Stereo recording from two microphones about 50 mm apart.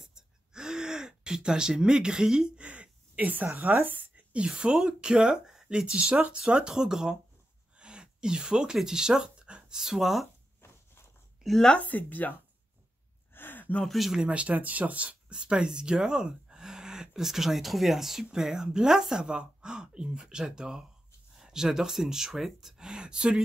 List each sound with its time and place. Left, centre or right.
0.0 s gasp: centre; by 3.4 s right
3.5 s speech: right
4.5 s speech: centre
7.7 s a sound: centre
9.8 s speech: centre
11.4 s speech: centre
11.8 s speech: left
13.3 s a sound: left
13.8 s speech: centre
14.1 s speech: right